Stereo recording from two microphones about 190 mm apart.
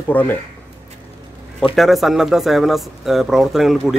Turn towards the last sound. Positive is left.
turn(degrees=0)  # may be behind; listen again after turning